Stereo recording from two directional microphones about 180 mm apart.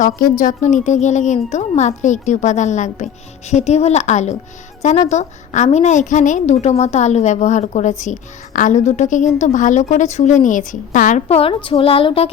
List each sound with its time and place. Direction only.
0.2 s a woman's voice: 45° left (ahead or behind); by 12.3 s 30° left (ahead or behind)